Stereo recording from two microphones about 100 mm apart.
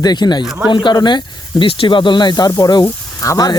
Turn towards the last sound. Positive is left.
turn(degrees=40)  # may be behind; listen again after turning